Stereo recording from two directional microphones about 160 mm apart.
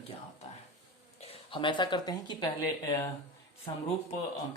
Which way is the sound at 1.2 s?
35° left (ahead or behind).